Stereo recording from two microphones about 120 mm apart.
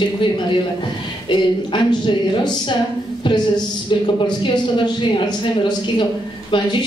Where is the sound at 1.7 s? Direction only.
40° left (ahead or behind).